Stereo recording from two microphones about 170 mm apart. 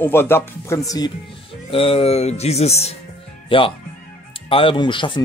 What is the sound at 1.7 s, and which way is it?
Speech, 35° left (ahead or behind).